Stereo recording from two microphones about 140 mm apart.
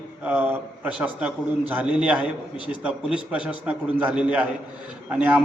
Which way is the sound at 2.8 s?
10° right (ahead or behind).